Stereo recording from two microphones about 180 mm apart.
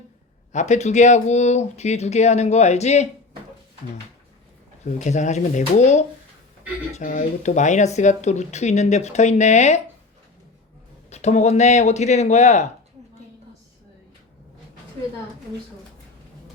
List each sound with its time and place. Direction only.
0.5 s speech: 40° left (ahead or behind)
4.9 s speech: 40° left (ahead or behind)
11.1 s speech: 40° left (ahead or behind)